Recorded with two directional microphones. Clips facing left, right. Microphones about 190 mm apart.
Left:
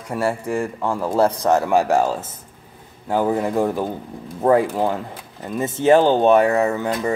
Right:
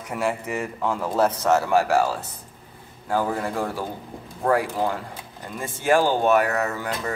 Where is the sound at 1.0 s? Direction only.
15° left (ahead or behind).